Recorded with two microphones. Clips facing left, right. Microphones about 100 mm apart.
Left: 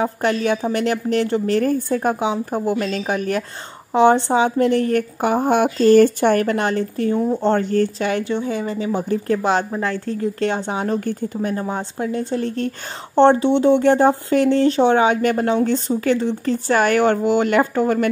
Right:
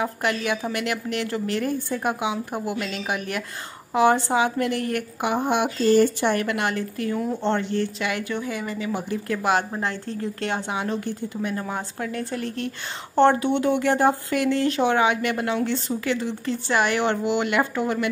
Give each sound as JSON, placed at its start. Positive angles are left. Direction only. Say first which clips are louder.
{"t": 0.0, "sound": "a woman's voice", "louder": "left 6 dB", "side_deg": 35}
{"t": 7.4, "sound": "a woman's voice", "louder": "left 6 dB", "side_deg": 45}
{"t": 10.7, "sound": "speech", "louder": "left 5 dB", "side_deg": 40}
{"t": 11.5, "sound": "speech", "louder": "left 5 dB", "side_deg": 25}
{"t": 13.1, "sound": "a woman's voice", "louder": "left 5 dB", "side_deg": 25}